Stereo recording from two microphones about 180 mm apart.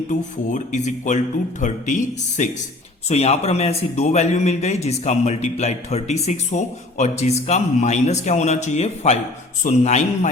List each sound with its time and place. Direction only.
0.1 s a man's voice: 40° left (ahead or behind)